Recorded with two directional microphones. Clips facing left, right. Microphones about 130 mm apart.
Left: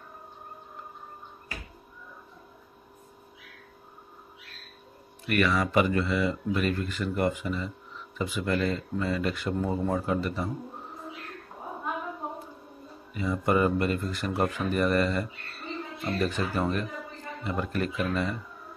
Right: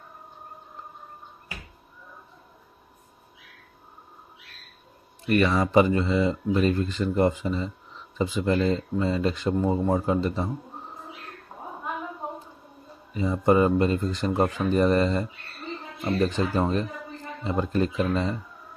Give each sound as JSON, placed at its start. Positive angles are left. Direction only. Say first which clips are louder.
{"t": 5.2, "sound": "speech", "louder": "right 4 dB", "side_deg": -30}
{"t": 13.1, "sound": "speech", "louder": "right 5 dB", "side_deg": -25}
{"t": 16.3, "sound": "speech", "louder": "right 4 dB", "side_deg": -25}